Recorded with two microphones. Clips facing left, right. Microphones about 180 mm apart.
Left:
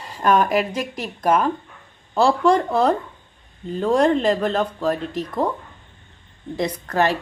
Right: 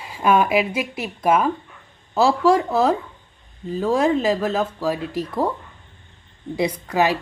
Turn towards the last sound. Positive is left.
turn(degrees=-10)  # may be behind; listen again after turning